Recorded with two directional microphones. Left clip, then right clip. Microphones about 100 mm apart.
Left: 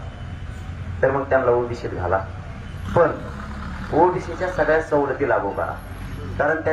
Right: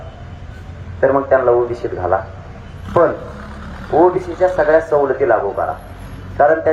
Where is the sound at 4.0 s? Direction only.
50° right (ahead or behind).